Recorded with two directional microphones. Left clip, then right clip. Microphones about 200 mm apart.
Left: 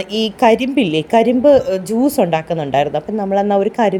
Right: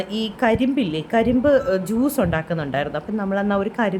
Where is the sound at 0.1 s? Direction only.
20° left (ahead or behind).